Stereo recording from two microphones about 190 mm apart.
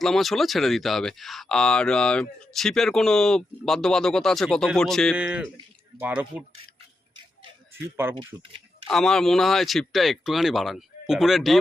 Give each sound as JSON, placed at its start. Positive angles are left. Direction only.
{"t": 0.0, "sound": "speech", "side_deg": 0}
{"t": 8.1, "sound": "speech", "side_deg": -25}
{"t": 8.9, "sound": "speech", "side_deg": 0}